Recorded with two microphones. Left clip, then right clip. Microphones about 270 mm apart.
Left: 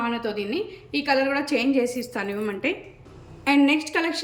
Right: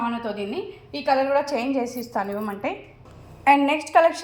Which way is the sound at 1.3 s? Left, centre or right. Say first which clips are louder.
Right 1 dB; centre.